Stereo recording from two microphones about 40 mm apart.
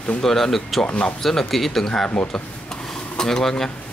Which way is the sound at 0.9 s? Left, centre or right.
Left.